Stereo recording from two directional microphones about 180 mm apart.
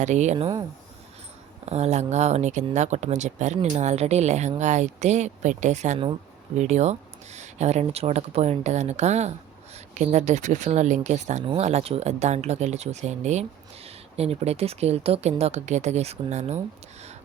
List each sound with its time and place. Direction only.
0.0 s speech: 40° right (ahead or behind)
1.6 s speech: 35° right (ahead or behind)